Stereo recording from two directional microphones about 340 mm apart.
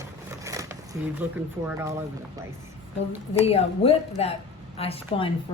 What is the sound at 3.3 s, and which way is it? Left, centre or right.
Speech, centre.